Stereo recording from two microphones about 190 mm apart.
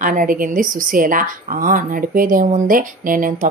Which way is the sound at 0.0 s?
45° right (ahead or behind).